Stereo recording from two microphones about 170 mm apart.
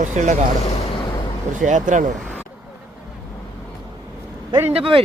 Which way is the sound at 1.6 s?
45° right (ahead or behind).